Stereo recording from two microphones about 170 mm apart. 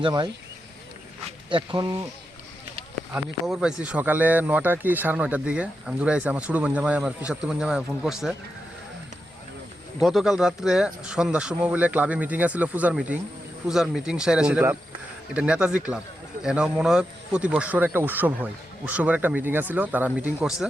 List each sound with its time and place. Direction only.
0.0 s speech: 25° right (ahead or behind)
1.5 s speech: 30° right (ahead or behind)
3.1 s speech: 5° right (ahead or behind)
10.0 s speech: centre (ahead or behind)